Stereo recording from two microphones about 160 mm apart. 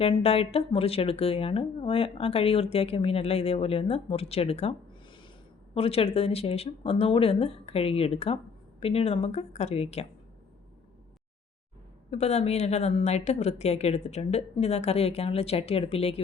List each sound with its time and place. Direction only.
0.0 s speech: 40° left (ahead or behind)
12.1 s speech: 40° left (ahead or behind)